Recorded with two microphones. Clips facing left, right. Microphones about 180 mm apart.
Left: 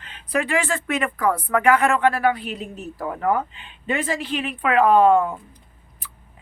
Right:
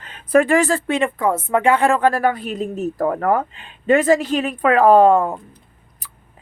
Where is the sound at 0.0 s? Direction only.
45° right (ahead or behind).